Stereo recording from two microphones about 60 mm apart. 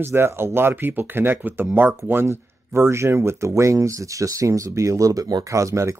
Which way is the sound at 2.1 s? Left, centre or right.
Right.